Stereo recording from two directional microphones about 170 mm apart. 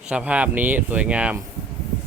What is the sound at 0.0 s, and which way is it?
Speech, 5° right (ahead or behind).